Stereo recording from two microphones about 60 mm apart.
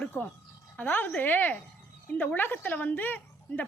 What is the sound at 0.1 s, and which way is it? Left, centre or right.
A woman's voice, left.